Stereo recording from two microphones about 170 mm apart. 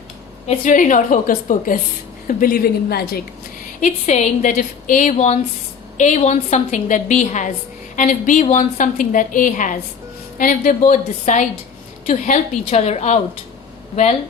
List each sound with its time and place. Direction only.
0.4 s a woman's voice: 45° left (ahead or behind); by 3.2 s 65° left (ahead or behind)
3.8 s a woman's voice: 45° left (ahead or behind)